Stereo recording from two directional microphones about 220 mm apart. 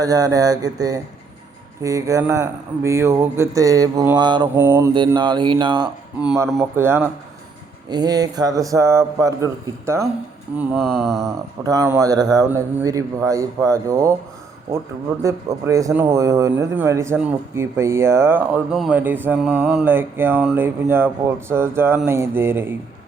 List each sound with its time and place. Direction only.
0.0 s a man's voice: 15° right (ahead or behind)
4.9 s speech: 20° right (ahead or behind)
6.1 s a man's voice: 10° right (ahead or behind)
10.6 s mantra: centre (ahead or behind)
11.6 s a man's voice: 15° right (ahead or behind)
15.2 s a man's voice: 15° right (ahead or behind)